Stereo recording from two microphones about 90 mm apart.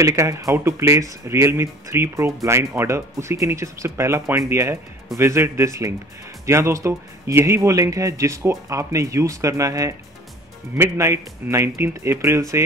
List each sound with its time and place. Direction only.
0.0 s speech: 35° right (ahead or behind)